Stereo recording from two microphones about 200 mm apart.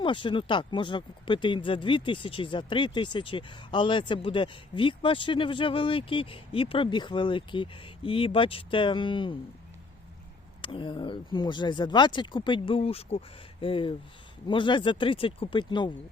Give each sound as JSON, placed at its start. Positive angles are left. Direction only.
{"t": 0.0, "sound": "speech", "side_deg": 25}
{"t": 10.6, "sound": "speech", "side_deg": 25}